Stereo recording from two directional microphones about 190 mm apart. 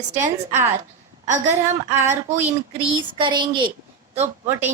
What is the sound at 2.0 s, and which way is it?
Speech, 40° right (ahead or behind).